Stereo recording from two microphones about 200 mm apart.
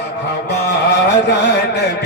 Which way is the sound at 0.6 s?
60° left (ahead or behind).